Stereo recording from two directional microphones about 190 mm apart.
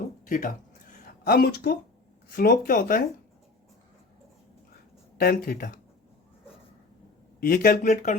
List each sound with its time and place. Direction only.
0.3 s speech: 45° left (ahead or behind)
5.1 s speech: 50° left (ahead or behind)
7.3 s speech: 50° left (ahead or behind)